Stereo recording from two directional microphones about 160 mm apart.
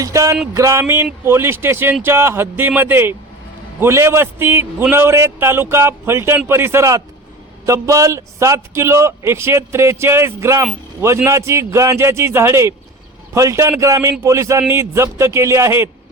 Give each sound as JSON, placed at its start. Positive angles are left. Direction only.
{"t": 0.0, "sound": "a man's voice", "side_deg": -20}